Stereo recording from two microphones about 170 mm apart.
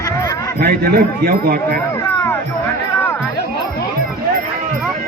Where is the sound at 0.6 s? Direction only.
65° right (ahead or behind).